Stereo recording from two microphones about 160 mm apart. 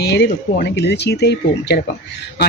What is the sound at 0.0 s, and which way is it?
Speech, 85° left.